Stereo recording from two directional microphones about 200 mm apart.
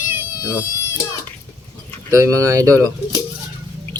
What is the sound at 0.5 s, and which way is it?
Cat, 15° left (ahead or behind).